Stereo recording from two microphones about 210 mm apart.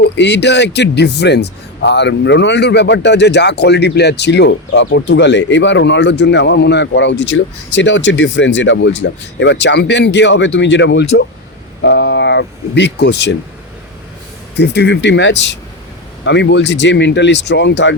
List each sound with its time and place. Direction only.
0.0 s a man's voice: 55° left (ahead or behind)
14.5 s a man's voice: 50° left (ahead or behind)